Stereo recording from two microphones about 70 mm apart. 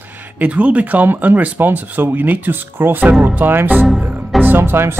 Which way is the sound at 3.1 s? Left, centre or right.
Centre.